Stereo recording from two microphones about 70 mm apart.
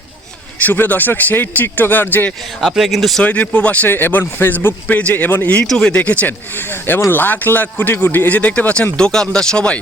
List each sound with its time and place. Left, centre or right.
0.6 s speech: left
2.6 s speech: centre
3.2 s speech: left
3.8 s speech: left
5.6 s speech: centre
6.0 s speech: left